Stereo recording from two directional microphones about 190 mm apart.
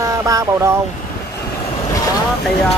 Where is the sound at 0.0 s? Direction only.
15° right (ahead or behind).